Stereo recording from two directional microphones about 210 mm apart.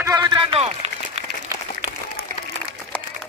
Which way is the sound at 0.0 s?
20° right (ahead or behind).